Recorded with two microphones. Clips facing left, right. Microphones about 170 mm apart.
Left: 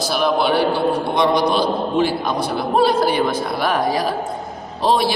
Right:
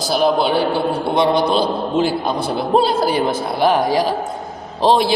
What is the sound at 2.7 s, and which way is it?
A woman's voice, 30° right (ahead or behind).